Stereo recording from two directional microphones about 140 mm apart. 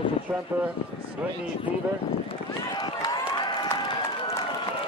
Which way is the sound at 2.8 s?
30° left (ahead or behind).